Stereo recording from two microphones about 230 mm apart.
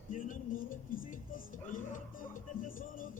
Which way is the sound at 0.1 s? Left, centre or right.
Left.